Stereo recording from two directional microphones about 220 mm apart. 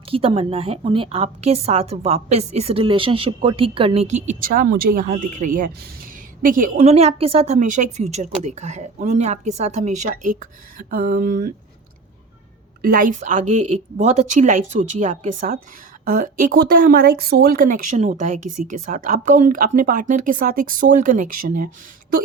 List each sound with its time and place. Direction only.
0.1 s a woman's voice: 25° right (ahead or behind)
12.8 s a woman's voice: 40° right (ahead or behind)